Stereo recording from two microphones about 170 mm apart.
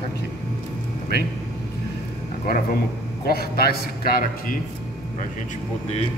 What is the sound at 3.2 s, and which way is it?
A man's voice, 65° left (ahead or behind).